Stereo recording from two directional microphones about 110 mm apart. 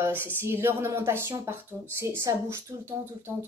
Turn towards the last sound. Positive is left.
turn(degrees=-25)  # may be behind; listen again after turning